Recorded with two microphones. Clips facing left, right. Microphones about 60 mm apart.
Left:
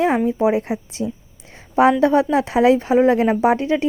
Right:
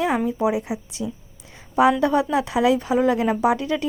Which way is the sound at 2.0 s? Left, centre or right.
Left.